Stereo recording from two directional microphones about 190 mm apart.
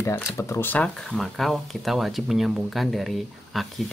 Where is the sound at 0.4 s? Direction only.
15° left (ahead or behind).